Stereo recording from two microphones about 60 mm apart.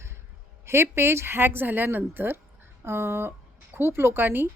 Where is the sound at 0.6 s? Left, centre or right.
Right.